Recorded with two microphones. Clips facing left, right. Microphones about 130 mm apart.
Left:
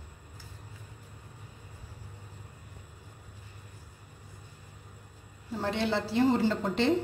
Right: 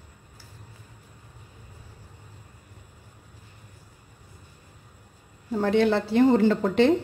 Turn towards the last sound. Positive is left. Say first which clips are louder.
# right 7 dB
turn(degrees=-60)  # may be behind; listen again after turning